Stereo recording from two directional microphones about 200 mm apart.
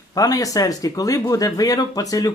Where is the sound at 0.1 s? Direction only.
15° left (ahead or behind).